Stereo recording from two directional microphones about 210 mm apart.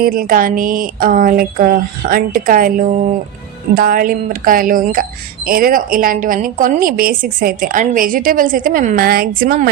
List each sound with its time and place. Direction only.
0.0 s a woman's voice: 40° right (ahead or behind)